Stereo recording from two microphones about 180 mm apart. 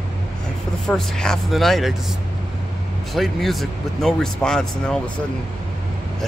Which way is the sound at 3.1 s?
Centre (ahead or behind).